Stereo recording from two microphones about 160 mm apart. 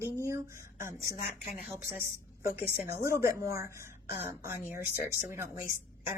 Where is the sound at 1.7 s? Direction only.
15° right (ahead or behind).